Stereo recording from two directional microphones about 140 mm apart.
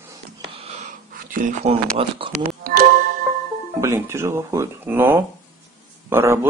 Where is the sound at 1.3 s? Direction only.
70° right (ahead or behind).